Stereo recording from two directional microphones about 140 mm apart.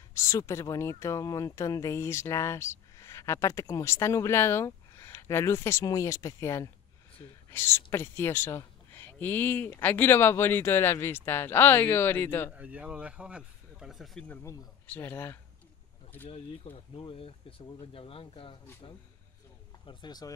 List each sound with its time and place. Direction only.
0.1 s speech: 20° left (ahead or behind)
12.5 s speech: 10° right (ahead or behind)
14.2 s speech: 15° left (ahead or behind)
16.7 s speech: 40° left (ahead or behind)
19.9 s speech: 30° left (ahead or behind)